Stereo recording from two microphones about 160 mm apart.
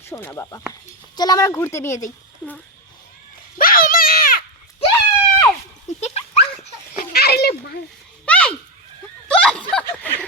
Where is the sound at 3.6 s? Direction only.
65° left (ahead or behind).